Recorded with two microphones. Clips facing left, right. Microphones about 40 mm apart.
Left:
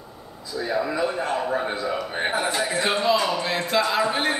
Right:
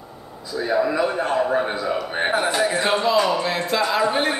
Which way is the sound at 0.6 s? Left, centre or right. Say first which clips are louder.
Right 4 dB; centre.